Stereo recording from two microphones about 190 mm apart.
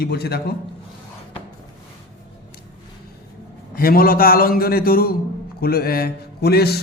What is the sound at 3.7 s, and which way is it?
A man's voice, 50° left (ahead or behind).